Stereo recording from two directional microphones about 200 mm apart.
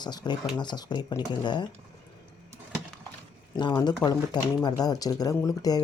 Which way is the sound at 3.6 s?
20° left (ahead or behind).